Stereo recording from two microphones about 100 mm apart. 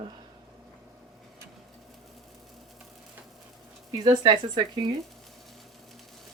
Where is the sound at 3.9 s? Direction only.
45° right (ahead or behind).